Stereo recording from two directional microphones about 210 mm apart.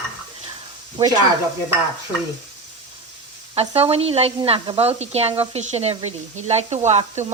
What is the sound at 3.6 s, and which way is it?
Speech, 30° right (ahead or behind).